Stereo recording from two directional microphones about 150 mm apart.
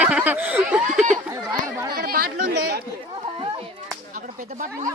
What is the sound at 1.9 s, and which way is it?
Chatter, 75° right (ahead or behind).